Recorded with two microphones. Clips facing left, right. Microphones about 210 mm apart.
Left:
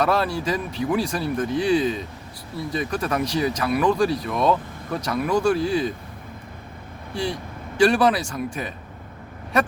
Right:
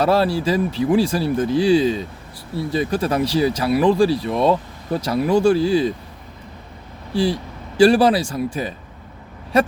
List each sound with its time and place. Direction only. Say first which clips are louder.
0.0 s speech: right 5 dB; 30° right (ahead or behind)
7.1 s speech: right 7 dB; 35° right (ahead or behind)